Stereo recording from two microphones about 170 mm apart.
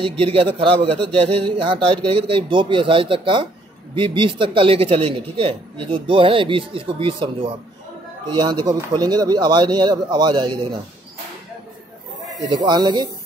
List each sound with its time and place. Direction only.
0.0 s speech: 30° right (ahead or behind)
12.6 s speech: 25° right (ahead or behind)